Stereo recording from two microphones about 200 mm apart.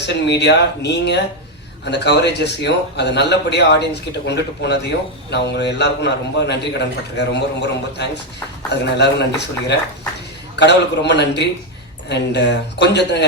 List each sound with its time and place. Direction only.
0.0 s a man's voice: 60° left (ahead or behind)